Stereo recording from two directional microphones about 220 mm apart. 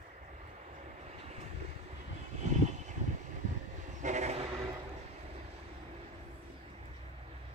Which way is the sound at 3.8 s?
35° right (ahead or behind).